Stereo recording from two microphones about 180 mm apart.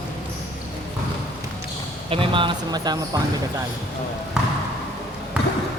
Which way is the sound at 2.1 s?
30° right (ahead or behind).